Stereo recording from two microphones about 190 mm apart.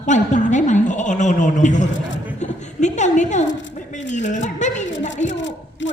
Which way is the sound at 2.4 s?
40° left (ahead or behind).